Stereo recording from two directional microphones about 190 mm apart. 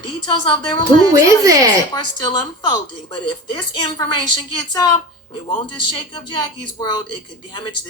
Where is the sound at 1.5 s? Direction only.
20° right (ahead or behind).